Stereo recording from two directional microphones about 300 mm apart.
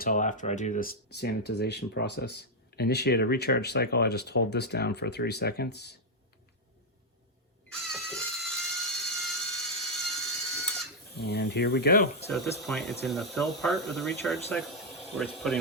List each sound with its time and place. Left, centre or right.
0.0 s speech: left
7.9 s music: centre
9.0 s a sound: centre
11.2 s speech: left
12.3 s speech: centre